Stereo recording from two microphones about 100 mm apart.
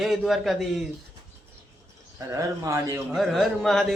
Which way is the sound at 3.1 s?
Centre (ahead or behind).